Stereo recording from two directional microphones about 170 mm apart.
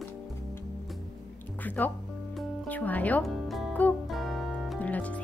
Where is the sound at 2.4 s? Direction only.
10° left (ahead or behind).